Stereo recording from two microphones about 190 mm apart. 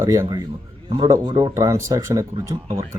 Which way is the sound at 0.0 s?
20° right (ahead or behind).